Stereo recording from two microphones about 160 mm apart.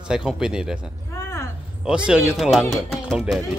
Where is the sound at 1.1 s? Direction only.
20° left (ahead or behind).